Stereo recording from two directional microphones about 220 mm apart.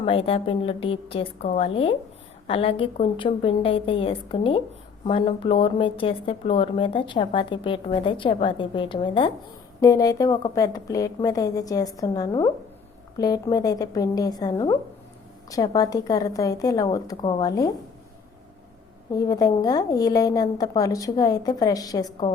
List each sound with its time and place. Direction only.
0.0 s a woman's voice: 25° left (ahead or behind)
19.1 s a woman's voice: 15° left (ahead or behind)